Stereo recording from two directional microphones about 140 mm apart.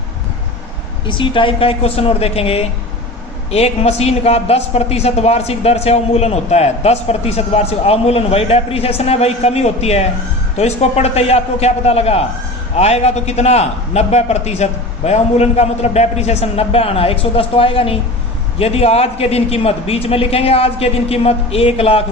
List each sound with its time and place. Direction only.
1.0 s a man's voice: 35° left (ahead or behind)